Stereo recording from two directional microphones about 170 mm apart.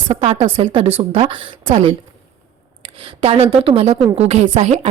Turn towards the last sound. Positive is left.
turn(degrees=-40)  # may be behind; listen again after turning